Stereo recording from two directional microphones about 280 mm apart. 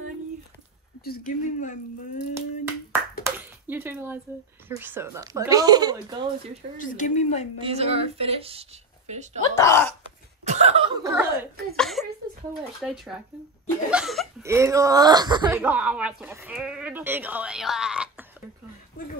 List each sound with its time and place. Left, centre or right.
1.0 s speech: left
2.3 s a sound: centre
4.6 s a woman's voice: centre
6.8 s speech: left
7.6 s a woman's voice: right
9.6 s speech: centre
10.4 s chuckle: right
11.7 s speech: centre